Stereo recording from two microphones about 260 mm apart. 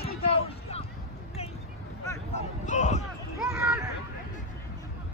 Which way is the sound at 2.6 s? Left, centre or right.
Left.